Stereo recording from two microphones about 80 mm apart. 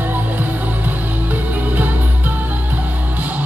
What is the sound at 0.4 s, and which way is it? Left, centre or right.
Music, right.